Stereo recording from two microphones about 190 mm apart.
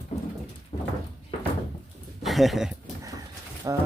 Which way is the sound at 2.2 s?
Centre (ahead or behind).